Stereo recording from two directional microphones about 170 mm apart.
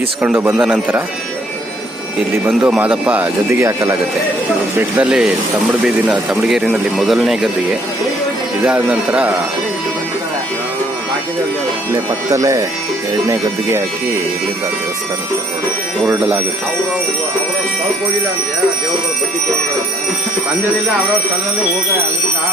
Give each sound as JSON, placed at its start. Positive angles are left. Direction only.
{"t": 0.2, "sound": "speech", "side_deg": -10}
{"t": 2.5, "sound": "speech", "side_deg": -5}
{"t": 11.9, "sound": "speech", "side_deg": -20}